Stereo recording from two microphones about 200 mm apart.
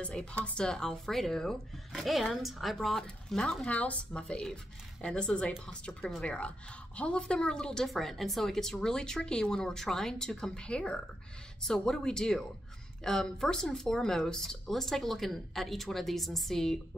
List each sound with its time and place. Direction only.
0.0 s speech: 5° left (ahead or behind)